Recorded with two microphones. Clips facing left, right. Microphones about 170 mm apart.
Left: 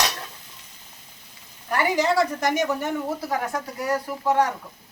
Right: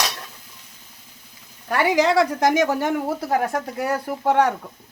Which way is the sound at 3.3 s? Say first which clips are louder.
Right 5 dB; 55° right (ahead or behind).